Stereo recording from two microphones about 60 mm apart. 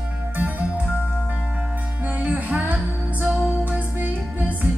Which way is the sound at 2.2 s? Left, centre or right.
Right.